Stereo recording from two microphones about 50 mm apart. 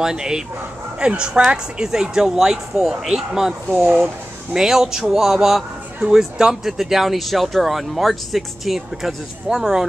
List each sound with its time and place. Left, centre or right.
0.0 s speech: centre
3.8 s speech: right
4.6 s speech: centre